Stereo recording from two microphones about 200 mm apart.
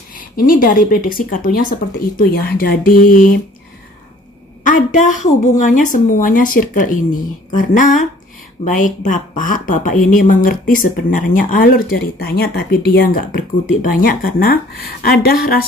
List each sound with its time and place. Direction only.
0.4 s speech: 45° left (ahead or behind)
4.6 s speech: 40° left (ahead or behind)